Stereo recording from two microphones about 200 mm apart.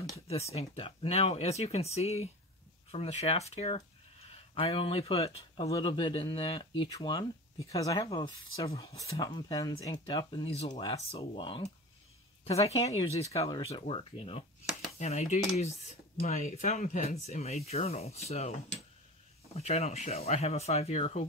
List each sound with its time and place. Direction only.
0.3 s speech: 30° left (ahead or behind)
19.5 s speech: 30° left (ahead or behind)